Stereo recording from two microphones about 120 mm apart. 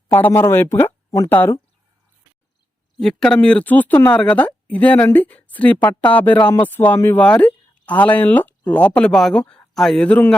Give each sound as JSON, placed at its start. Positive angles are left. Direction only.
{"t": 0.1, "sound": "speech", "side_deg": 15}
{"t": 3.0, "sound": "speech", "side_deg": 5}